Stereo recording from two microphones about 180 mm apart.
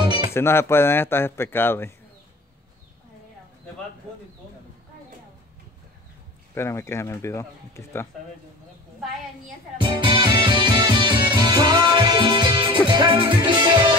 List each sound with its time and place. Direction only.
0.0 s music: 25° right (ahead or behind)
0.3 s speech: 15° left (ahead or behind)
6.5 s speech: 15° left (ahead or behind)
9.8 s music: 25° right (ahead or behind)